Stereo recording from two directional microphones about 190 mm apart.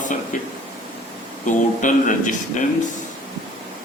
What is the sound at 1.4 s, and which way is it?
Speech, 40° left (ahead or behind).